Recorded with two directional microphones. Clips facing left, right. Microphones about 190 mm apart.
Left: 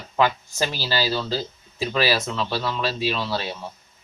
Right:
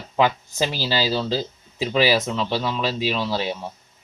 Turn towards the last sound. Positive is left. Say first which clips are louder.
# right 3 dB
turn(degrees=-15)  # may be behind; listen again after turning